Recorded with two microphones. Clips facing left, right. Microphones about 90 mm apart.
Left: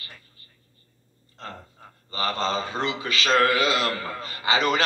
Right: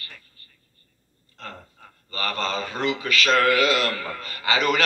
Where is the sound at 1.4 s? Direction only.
25° left (ahead or behind).